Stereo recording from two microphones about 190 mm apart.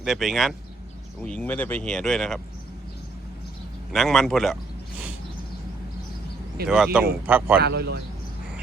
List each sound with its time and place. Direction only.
0.0 s speech: centre (ahead or behind)
3.9 s speech: centre (ahead or behind)
6.7 s a man's voice: 5° right (ahead or behind)
7.6 s a man's voice: 60° right (ahead or behind)